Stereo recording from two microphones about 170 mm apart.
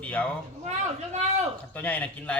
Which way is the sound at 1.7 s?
10° left (ahead or behind).